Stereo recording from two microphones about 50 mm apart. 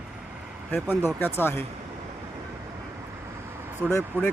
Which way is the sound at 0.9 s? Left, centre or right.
Left.